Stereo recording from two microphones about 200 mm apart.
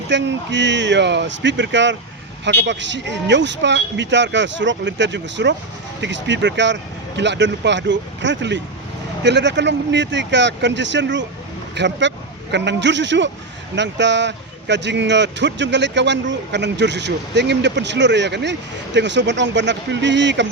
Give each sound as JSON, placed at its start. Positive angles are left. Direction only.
{"t": 0.1, "sound": "speech", "side_deg": -65}